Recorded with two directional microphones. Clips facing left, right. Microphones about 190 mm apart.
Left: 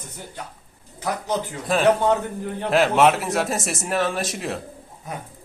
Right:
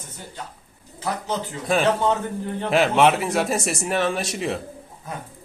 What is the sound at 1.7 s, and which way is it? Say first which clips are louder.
Speech: left 2 dB; centre (ahead or behind).